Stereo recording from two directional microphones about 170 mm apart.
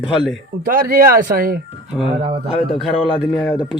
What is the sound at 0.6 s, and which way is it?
Speech, 55° right (ahead or behind).